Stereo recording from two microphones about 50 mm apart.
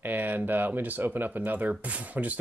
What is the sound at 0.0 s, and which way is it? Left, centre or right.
Speech, right.